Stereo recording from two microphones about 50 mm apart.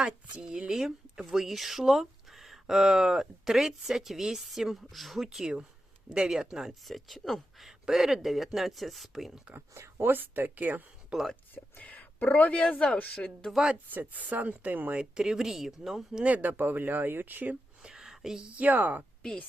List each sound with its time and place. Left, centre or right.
0.0 s speech: centre
9.6 s speech: right
10.1 s speech: right
11.1 s speech: centre
11.8 s a sound: left
12.4 s speech: left
13.9 s speech: right
14.9 s speech: centre
16.2 s speech: right
17.8 s a sound: centre
18.4 s speech: right